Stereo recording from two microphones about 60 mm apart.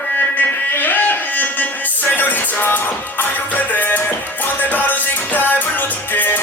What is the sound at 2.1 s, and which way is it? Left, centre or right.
Music, left.